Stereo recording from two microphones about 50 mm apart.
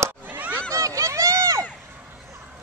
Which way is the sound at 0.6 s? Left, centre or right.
Right.